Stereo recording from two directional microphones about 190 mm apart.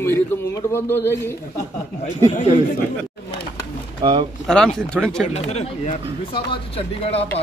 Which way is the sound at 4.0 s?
25° right (ahead or behind).